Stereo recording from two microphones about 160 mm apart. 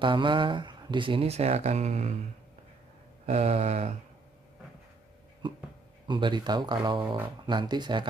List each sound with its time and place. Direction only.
0.0 s speech: 30° right (ahead or behind)
3.3 s speech: 45° right (ahead or behind)
6.0 s speech: 30° right (ahead or behind)